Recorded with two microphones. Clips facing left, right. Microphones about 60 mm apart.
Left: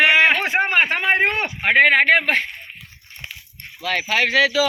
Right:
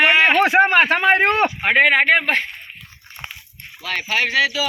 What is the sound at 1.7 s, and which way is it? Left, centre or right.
Speech, left.